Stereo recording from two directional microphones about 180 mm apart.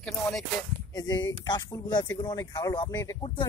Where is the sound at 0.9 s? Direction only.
20° left (ahead or behind).